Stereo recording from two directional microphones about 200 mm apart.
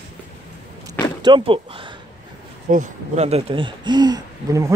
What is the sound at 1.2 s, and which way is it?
Speech, 25° right (ahead or behind).